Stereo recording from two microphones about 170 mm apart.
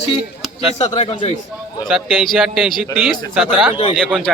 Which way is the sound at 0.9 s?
40° left (ahead or behind).